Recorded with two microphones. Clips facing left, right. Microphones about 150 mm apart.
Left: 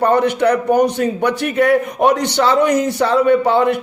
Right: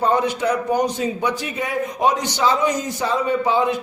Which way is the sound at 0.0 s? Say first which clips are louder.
Left 5 dB; 65° left (ahead or behind).